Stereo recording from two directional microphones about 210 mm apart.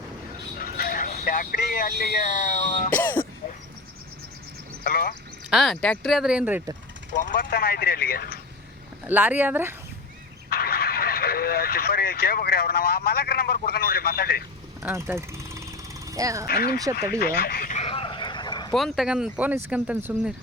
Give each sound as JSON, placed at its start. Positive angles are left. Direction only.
{"t": 0.6, "sound": "speech", "side_deg": 45}
{"t": 2.9, "sound": "throat clearing", "side_deg": 10}
{"t": 4.8, "sound": "speech", "side_deg": 45}
{"t": 5.5, "sound": "speech", "side_deg": 0}
{"t": 7.2, "sound": "speech", "side_deg": 45}
{"t": 9.0, "sound": "speech", "side_deg": -10}
{"t": 10.5, "sound": "speech", "side_deg": 45}
{"t": 14.8, "sound": "vehicle", "side_deg": -10}
{"t": 16.1, "sound": "speech", "side_deg": -15}
{"t": 16.5, "sound": "speech", "side_deg": 45}
{"t": 17.2, "sound": "a sound", "side_deg": 45}
{"t": 18.7, "sound": "speech", "side_deg": 0}